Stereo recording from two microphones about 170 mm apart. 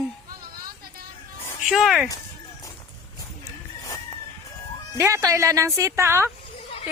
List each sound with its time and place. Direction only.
1.7 s speech: centre (ahead or behind)
4.9 s speech: 15° right (ahead or behind)